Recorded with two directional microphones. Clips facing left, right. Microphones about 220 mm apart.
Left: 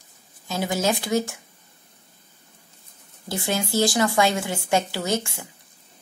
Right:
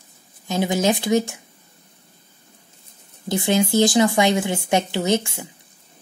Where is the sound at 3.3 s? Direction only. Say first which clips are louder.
Right 6 dB; 20° right (ahead or behind).